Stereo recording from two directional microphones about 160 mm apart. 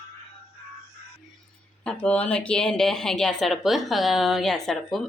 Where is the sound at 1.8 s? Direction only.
5° left (ahead or behind).